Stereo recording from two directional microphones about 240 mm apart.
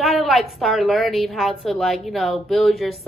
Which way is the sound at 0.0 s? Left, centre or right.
Centre.